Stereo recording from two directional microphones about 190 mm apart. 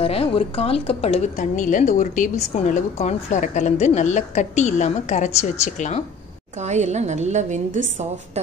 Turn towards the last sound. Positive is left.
turn(degrees=-40)  # may be behind; listen again after turning